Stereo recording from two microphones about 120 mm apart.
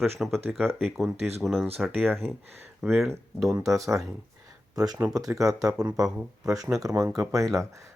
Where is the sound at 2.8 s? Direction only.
Centre (ahead or behind).